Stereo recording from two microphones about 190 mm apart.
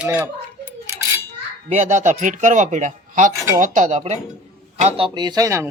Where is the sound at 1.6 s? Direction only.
40° right (ahead or behind).